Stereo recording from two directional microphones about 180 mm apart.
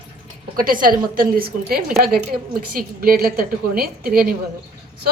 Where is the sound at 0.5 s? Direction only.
50° right (ahead or behind).